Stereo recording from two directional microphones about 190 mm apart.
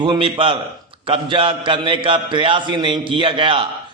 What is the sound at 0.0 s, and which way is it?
A man's voice, 25° right (ahead or behind).